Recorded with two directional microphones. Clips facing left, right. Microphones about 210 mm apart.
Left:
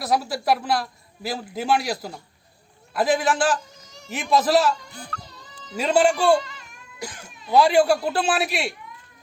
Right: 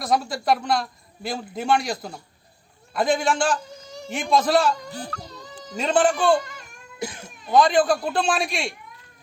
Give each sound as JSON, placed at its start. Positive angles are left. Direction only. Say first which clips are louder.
{"t": 0.0, "sound": "a man's voice", "louder": "even", "side_deg": 5}
{"t": 5.7, "sound": "a man's voice", "louder": "left 1 dB", "side_deg": 10}
{"t": 6.4, "sound": "baby cry", "louder": "right 1 dB", "side_deg": -50}
{"t": 7.0, "sound": "speech", "louder": "right 4 dB", "side_deg": -25}
{"t": 7.5, "sound": "a man's voice", "louder": "left 1 dB", "side_deg": 10}